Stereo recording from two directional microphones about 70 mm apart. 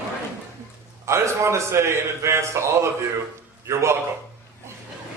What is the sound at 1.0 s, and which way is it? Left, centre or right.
A man's voice, right.